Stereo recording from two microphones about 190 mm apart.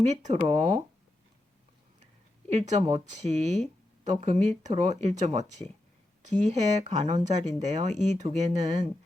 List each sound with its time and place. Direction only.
0.0 s speech: 40° right (ahead or behind)
2.5 s speech: 35° right (ahead or behind)